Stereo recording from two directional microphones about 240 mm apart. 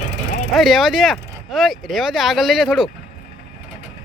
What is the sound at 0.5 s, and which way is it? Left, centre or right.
Speech, centre.